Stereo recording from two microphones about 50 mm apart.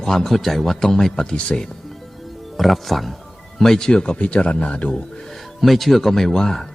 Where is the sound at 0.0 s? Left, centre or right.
Centre.